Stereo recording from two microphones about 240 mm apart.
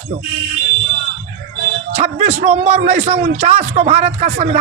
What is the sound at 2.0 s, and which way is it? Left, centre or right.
A man's voice, right.